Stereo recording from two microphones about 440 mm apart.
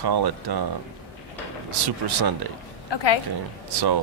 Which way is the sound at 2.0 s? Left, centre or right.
Right.